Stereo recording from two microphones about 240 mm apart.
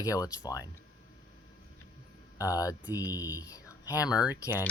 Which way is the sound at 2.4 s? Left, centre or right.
Centre.